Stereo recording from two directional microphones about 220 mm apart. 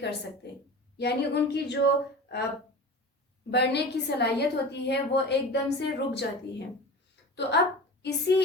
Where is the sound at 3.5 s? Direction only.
50° left (ahead or behind).